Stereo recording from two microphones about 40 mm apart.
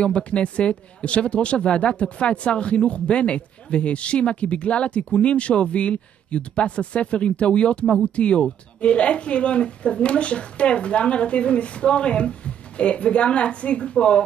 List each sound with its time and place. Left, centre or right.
0.0 s speech: left